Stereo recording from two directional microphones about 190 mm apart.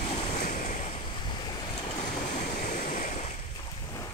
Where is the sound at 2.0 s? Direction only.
45° left (ahead or behind).